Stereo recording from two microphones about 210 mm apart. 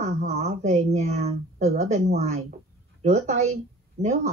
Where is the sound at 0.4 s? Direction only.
30° right (ahead or behind).